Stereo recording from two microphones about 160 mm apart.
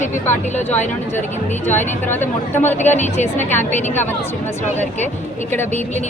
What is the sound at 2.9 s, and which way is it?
Speech, 45° left (ahead or behind).